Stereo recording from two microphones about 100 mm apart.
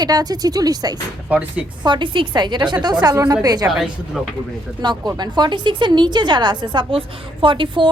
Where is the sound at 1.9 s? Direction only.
50° right (ahead or behind).